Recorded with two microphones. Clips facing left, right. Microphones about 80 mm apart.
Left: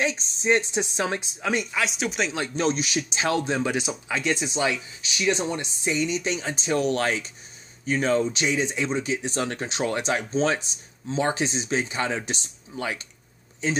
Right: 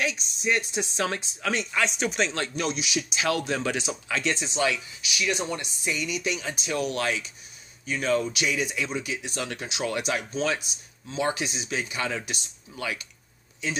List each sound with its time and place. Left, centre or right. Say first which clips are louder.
0.0 s speech: left 3 dB; left
1.7 s speech: even; centre
2.5 s speech: left 4 dB; left